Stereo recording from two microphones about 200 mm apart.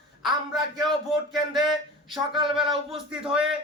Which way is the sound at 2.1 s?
25° right (ahead or behind).